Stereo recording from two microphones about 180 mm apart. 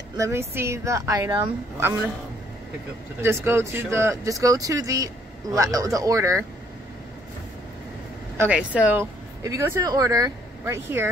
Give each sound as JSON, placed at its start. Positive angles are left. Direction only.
{"t": 0.2, "sound": "speech", "side_deg": -15}
{"t": 3.2, "sound": "speech", "side_deg": -15}
{"t": 8.4, "sound": "speech", "side_deg": -5}